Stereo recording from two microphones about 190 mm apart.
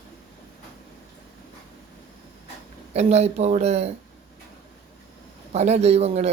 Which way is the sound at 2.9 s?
35° right (ahead or behind).